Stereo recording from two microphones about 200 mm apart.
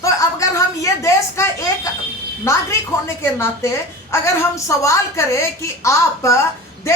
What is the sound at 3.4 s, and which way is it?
A woman's voice, 15° left (ahead or behind).